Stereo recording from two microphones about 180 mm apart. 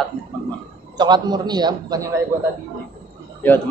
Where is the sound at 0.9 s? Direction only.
25° right (ahead or behind).